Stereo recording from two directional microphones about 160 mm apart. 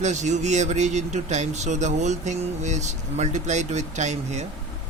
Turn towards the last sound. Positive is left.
turn(degrees=-45)  # may be behind; listen again after turning